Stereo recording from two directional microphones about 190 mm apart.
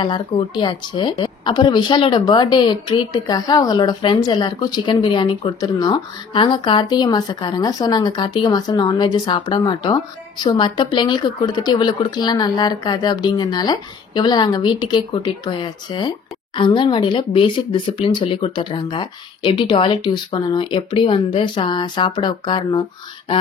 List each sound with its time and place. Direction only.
0.0 s a woman's voice: 25° left (ahead or behind)